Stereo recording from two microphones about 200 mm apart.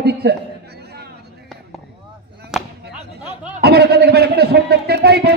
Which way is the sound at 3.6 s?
55° right (ahead or behind).